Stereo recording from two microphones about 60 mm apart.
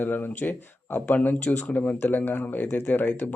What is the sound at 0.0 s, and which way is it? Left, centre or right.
Speech, left.